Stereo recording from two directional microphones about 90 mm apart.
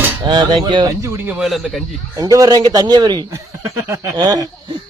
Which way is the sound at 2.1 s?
45° right (ahead or behind).